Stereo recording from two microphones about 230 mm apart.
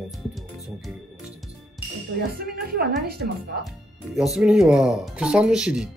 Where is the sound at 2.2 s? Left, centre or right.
Right.